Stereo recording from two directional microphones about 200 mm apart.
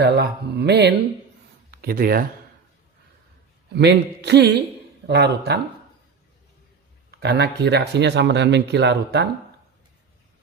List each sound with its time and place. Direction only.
0.0 s speech: 55° right (ahead or behind)
3.7 s speech: 60° right (ahead or behind)
7.1 s speech: 55° right (ahead or behind)